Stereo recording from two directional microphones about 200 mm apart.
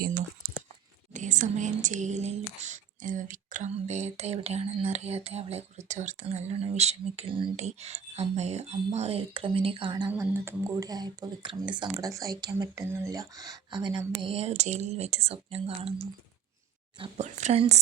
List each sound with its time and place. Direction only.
1.1 s speech: 40° right (ahead or behind); by 10.1 s 25° right (ahead or behind)
10.1 s speech: 10° right (ahead or behind); by 17.7 s 30° right (ahead or behind)